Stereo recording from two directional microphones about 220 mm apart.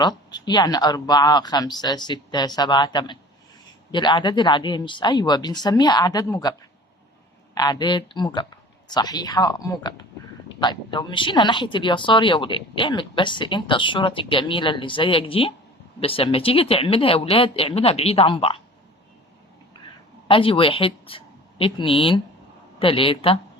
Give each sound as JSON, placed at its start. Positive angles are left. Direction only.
{"t": 0.0, "sound": "speech", "side_deg": 20}
{"t": 7.5, "sound": "speech", "side_deg": 20}
{"t": 20.2, "sound": "speech", "side_deg": 25}